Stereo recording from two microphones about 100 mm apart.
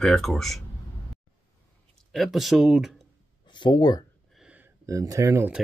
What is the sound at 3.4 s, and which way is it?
Speech, 50° left (ahead or behind).